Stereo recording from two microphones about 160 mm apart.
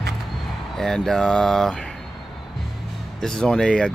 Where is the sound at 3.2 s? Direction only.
5° left (ahead or behind).